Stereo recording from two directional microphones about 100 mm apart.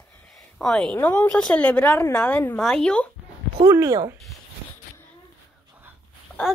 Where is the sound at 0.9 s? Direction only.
15° left (ahead or behind).